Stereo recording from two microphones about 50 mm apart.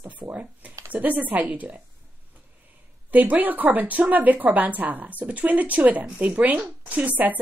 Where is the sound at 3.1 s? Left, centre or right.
Right.